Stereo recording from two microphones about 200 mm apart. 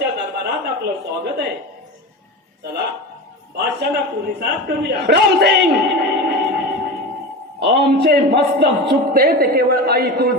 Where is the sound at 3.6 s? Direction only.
55° right (ahead or behind).